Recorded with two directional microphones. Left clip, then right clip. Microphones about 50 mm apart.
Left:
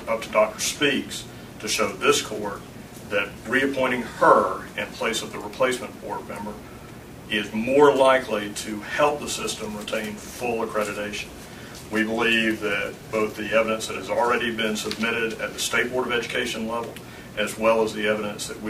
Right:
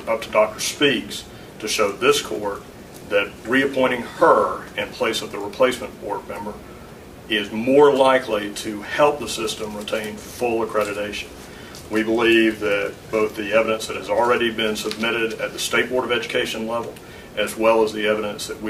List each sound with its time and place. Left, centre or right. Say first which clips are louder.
0.0 s speech: right 3 dB; right
7.2 s speech: right 4 dB; right